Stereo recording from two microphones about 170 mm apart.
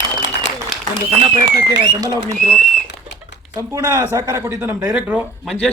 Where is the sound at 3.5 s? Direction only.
15° right (ahead or behind).